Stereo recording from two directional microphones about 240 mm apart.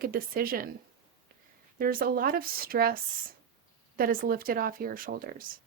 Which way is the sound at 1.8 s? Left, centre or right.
Right.